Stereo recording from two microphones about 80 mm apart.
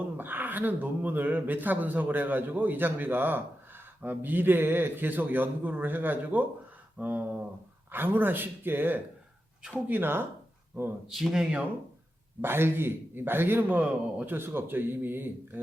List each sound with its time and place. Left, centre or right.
0.0 s speech: right
11.1 s speech: centre
12.4 s speech: right